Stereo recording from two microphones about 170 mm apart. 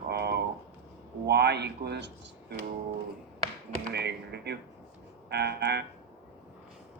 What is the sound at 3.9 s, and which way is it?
Speech, 75° right (ahead or behind).